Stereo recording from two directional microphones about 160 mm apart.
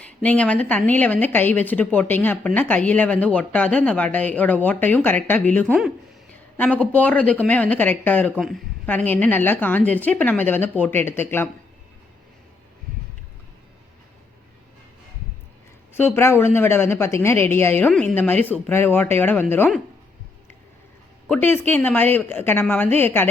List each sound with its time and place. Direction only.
0.2 s a woman's voice: 10° left (ahead or behind)
8.4 s speech: centre (ahead or behind)
8.9 s a woman's voice: 10° left (ahead or behind)
16.0 s a woman's voice: 15° left (ahead or behind)
21.2 s a woman's voice: 10° left (ahead or behind)